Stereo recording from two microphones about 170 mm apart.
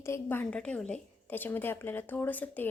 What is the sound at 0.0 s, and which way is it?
A woman's voice, 15° left (ahead or behind).